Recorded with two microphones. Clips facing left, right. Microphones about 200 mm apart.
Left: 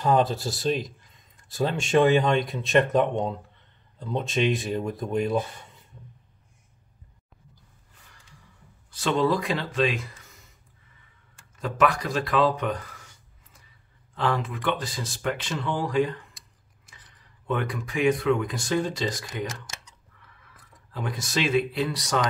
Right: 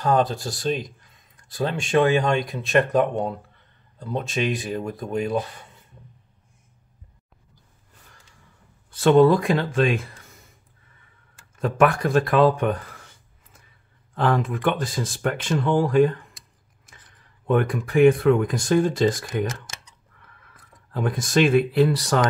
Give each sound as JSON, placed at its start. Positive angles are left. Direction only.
{"t": 0.0, "sound": "speech", "side_deg": 0}
{"t": 8.9, "sound": "speech", "side_deg": -55}
{"t": 11.6, "sound": "speech", "side_deg": -50}
{"t": 14.1, "sound": "speech", "side_deg": -50}